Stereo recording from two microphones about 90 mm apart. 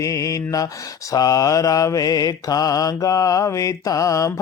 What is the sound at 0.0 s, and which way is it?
Mantra, 35° left (ahead or behind).